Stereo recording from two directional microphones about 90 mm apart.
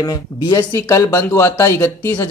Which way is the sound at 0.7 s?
40° left (ahead or behind).